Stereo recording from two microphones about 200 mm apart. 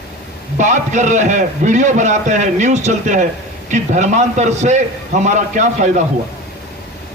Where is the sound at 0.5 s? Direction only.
40° right (ahead or behind).